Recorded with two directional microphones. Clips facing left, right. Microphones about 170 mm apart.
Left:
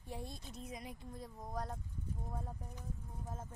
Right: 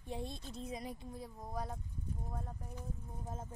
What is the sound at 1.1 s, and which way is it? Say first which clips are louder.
Speech: left 2 dB; 5° right (ahead or behind).